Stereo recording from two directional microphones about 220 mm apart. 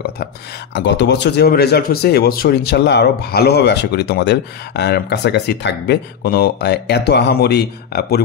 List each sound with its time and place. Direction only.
0.7 s speech: 50° left (ahead or behind)